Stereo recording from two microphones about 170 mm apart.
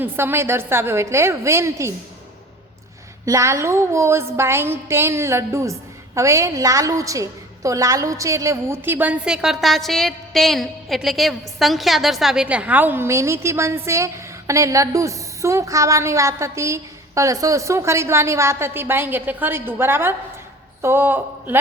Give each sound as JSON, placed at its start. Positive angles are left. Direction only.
{"t": 0.0, "sound": "a woman's voice", "side_deg": -15}
{"t": 3.2, "sound": "a woman's voice", "side_deg": -15}